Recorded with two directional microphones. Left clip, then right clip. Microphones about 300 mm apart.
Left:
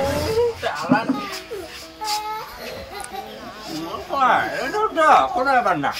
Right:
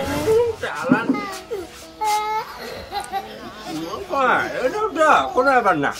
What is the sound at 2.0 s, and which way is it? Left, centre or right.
Child singing, centre.